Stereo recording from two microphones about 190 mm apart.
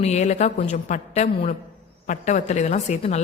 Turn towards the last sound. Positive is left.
turn(degrees=35)  # may be behind; listen again after turning